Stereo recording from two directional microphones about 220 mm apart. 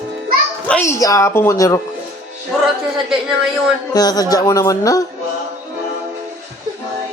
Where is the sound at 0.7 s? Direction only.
10° left (ahead or behind).